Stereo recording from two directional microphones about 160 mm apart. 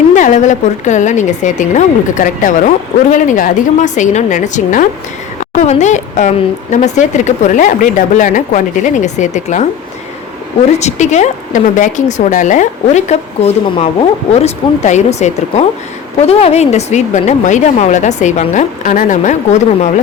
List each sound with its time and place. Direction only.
0.1 s a woman's voice: 50° left (ahead or behind)
10.8 s a woman's voice: 45° left (ahead or behind)